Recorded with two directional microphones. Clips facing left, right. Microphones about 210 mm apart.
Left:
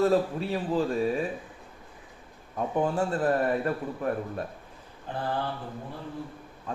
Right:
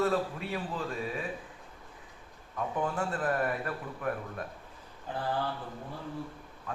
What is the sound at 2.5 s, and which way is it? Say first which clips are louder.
A man's voice: left 5 dB; 30° left (ahead or behind).